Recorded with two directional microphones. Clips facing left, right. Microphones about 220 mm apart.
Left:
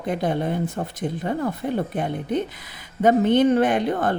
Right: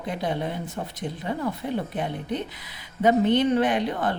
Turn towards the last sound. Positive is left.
turn(degrees=50)  # may be behind; listen again after turning